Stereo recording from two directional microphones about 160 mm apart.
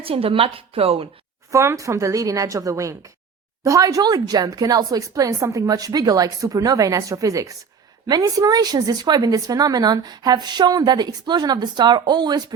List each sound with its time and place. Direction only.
0.0 s a woman's voice: 35° right (ahead or behind)
1.5 s a woman's voice: 20° right (ahead or behind)